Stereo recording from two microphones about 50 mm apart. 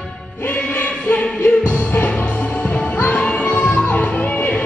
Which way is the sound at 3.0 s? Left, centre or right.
Left.